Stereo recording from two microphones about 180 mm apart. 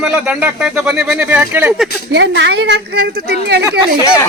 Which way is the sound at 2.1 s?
75° right (ahead or behind).